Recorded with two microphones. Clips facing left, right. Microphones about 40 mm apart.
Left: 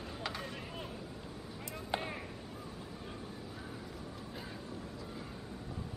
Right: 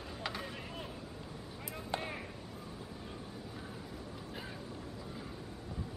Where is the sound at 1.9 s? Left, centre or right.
Centre.